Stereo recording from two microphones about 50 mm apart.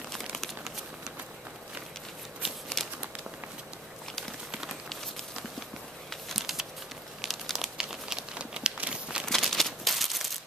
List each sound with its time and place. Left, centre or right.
2.4 s shuffling cards: centre
4.5 s run: centre
6.2 s computer keyboard: centre
7.5 s crumpling: centre
8.7 s a sound: right
9.2 s a sound: centre